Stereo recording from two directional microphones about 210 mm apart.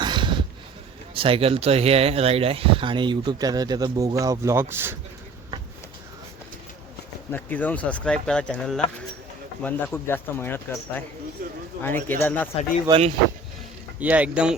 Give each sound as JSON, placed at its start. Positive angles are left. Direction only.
{"t": 0.0, "sound": "a sound", "side_deg": -20}
{"t": 1.1, "sound": "speech", "side_deg": -25}
{"t": 7.3, "sound": "speech", "side_deg": 10}
{"t": 12.9, "sound": "speech", "side_deg": -15}